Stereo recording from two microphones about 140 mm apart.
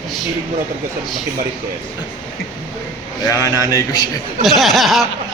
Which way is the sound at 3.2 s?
25° left (ahead or behind).